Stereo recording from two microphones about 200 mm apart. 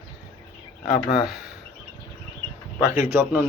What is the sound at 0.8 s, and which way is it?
Speech, 20° left (ahead or behind).